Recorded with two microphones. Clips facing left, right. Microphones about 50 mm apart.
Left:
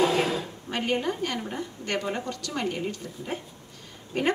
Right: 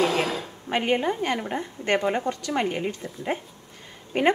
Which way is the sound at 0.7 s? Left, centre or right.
Right.